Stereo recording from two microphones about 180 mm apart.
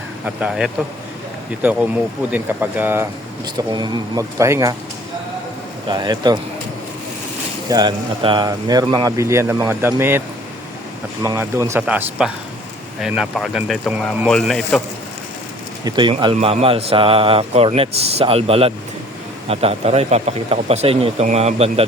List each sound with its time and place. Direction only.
0.3 s speech: 5° right (ahead or behind)
3.4 s speech: 25° right (ahead or behind)
5.9 s speech: 25° right (ahead or behind)
7.7 s speech: 25° right (ahead or behind); by 14.8 s 5° left (ahead or behind)
15.8 s speech: 25° right (ahead or behind)